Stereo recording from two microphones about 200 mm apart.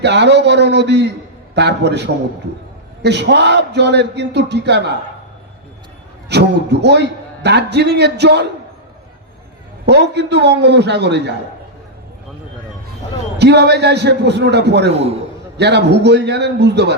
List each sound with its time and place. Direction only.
0.0 s a man's voice: 60° right (ahead or behind)
6.2 s a man's voice: 55° right (ahead or behind)
9.8 s a man's voice: 55° right (ahead or behind)
13.4 s a man's voice: 60° right (ahead or behind)
14.9 s a man's voice: 30° right (ahead or behind)
15.5 s a man's voice: 60° right (ahead or behind)